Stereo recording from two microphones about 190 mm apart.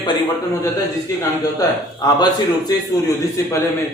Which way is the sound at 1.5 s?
20° left (ahead or behind).